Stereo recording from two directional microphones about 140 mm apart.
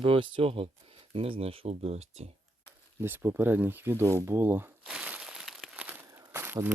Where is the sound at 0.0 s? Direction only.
40° right (ahead or behind).